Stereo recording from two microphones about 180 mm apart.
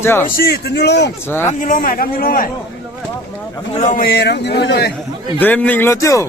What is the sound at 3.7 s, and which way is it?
A man's voice, 45° left (ahead or behind).